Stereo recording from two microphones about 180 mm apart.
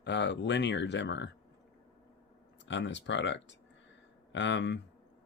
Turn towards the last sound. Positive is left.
turn(degrees=85)